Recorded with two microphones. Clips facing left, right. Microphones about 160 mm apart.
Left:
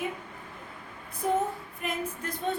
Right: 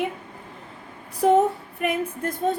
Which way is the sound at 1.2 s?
75° right (ahead or behind).